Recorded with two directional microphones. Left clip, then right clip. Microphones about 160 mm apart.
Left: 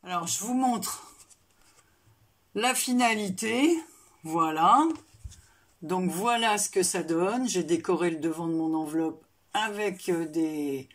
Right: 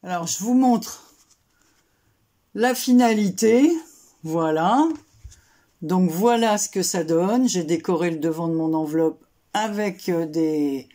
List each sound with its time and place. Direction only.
0.0 s speech: 30° right (ahead or behind)
2.5 s speech: 35° right (ahead or behind)